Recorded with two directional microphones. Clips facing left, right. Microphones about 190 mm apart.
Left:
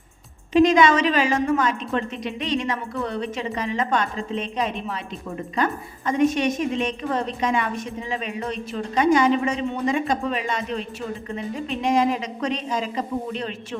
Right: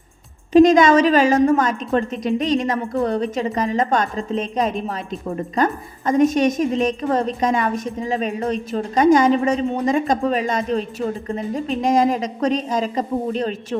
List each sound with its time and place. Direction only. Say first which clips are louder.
0.5 s a woman's voice: right 5 dB; 45° right (ahead or behind)